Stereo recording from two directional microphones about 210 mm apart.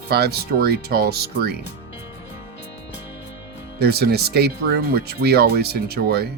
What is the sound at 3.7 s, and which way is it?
Speech, 50° right (ahead or behind).